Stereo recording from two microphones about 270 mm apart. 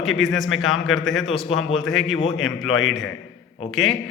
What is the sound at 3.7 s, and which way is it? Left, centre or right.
Speech, centre.